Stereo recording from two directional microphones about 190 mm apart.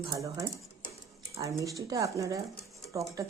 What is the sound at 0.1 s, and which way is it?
Speech, 20° right (ahead or behind).